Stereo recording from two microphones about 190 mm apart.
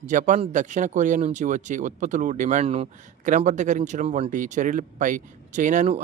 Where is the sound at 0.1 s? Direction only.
40° right (ahead or behind).